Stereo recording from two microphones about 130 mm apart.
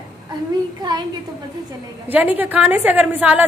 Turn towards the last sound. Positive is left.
turn(degrees=-10)  # may be behind; listen again after turning